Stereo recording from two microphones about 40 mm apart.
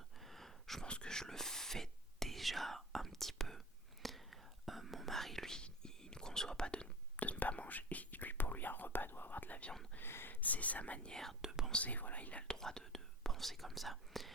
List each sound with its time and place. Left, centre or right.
0.2 s a sound: centre
0.9 s whispering: left
1.1 s whispering: centre
5.5 s whispering: centre
7.2 s whispering: left
10.0 s a sound: left
10.4 s whispering: left
11.1 s whispering: centre
11.4 s whispering: centre
11.8 s whispering: left
12.5 s whispering: centre